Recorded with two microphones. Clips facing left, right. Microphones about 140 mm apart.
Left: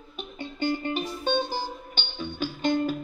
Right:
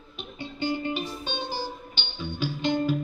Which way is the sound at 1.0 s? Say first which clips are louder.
Left 6 dB; 50° left (ahead or behind).